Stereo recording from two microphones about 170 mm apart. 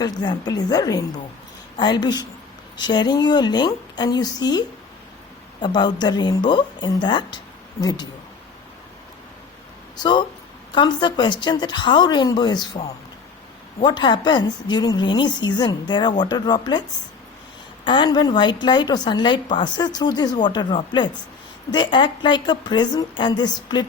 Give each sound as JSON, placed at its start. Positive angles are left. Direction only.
{"t": 0.0, "sound": "a woman's voice", "side_deg": 25}
{"t": 5.6, "sound": "a woman's voice", "side_deg": 25}
{"t": 10.0, "sound": "a woman's voice", "side_deg": 25}
{"t": 13.8, "sound": "a woman's voice", "side_deg": 25}
{"t": 17.8, "sound": "a woman's voice", "side_deg": 25}